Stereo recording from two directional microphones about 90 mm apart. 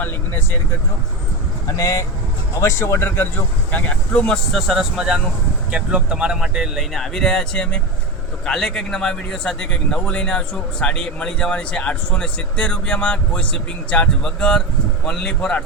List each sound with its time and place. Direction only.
0.0 s vehicle: 25° left (ahead or behind)
1.6 s speech: 40° left (ahead or behind); by 4.4 s 15° left (ahead or behind)
4.5 s speech: centre (ahead or behind)